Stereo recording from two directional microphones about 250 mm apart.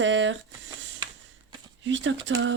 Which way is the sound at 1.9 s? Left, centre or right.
Right.